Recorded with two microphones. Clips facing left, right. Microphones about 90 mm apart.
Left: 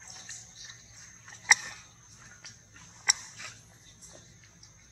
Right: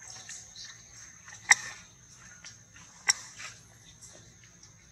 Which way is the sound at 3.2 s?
Centre (ahead or behind).